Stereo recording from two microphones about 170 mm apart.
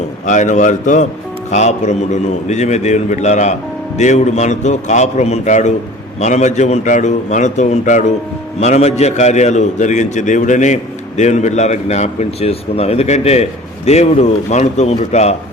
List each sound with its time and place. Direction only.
0.3 s a man's voice: 45° left (ahead or behind)